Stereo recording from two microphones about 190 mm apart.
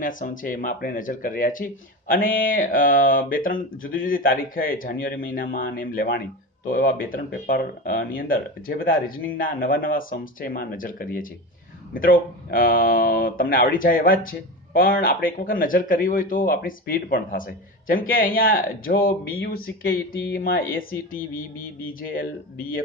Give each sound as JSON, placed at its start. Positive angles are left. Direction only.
{"t": 0.0, "sound": "speech", "side_deg": 45}